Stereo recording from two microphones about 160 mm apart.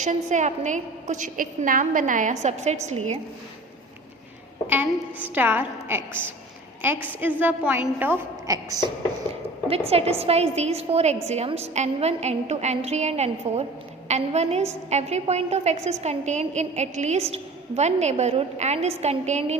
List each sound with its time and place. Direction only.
0.0 s a woman's voice: 50° right (ahead or behind)
4.7 s a woman's voice: 10° right (ahead or behind)
9.6 s a woman's voice: 40° right (ahead or behind)